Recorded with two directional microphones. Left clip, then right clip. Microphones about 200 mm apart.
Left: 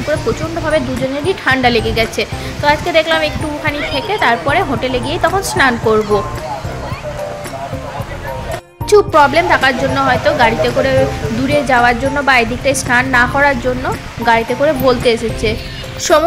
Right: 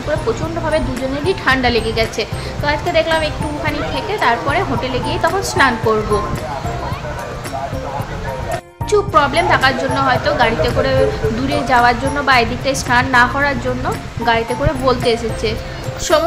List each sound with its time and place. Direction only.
0.7 s speech: 15° left (ahead or behind)
8.9 s a woman's voice: 25° left (ahead or behind)